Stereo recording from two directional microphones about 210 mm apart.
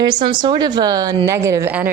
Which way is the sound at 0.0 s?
20° right (ahead or behind).